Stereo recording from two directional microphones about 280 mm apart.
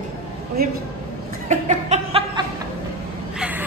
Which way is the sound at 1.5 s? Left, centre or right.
Right.